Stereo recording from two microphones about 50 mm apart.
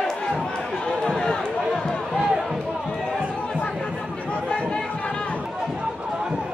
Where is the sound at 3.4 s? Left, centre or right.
Left.